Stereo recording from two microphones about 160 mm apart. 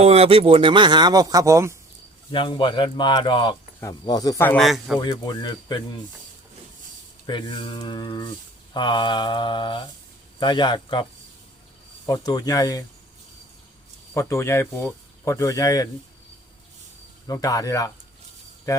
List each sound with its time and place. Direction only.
0.0 s speech: 40° right (ahead or behind); by 1.7 s 20° right (ahead or behind)
2.3 s speech: 30° left (ahead or behind)
4.4 s speech: 5° left (ahead or behind)
4.9 s speech: 25° left (ahead or behind)
7.3 s speech: 30° left (ahead or behind)
12.0 s speech: 25° left (ahead or behind)
14.1 s speech: 15° left (ahead or behind)
17.2 s speech: 20° left (ahead or behind)